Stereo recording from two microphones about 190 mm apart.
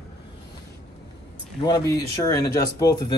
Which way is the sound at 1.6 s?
20° left (ahead or behind).